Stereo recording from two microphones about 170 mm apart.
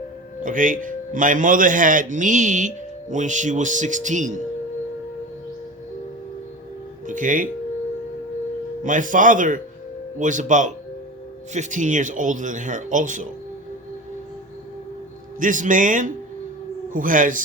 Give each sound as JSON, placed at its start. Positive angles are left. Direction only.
{"t": 0.4, "sound": "a man's voice", "side_deg": -50}
{"t": 7.1, "sound": "speech", "side_deg": -50}
{"t": 8.8, "sound": "a man's voice", "side_deg": -50}
{"t": 15.4, "sound": "a man's voice", "side_deg": -50}